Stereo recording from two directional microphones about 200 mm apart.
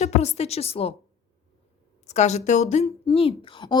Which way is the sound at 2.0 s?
35° left (ahead or behind).